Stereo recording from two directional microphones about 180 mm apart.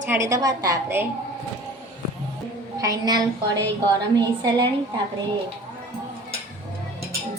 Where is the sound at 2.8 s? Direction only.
20° right (ahead or behind).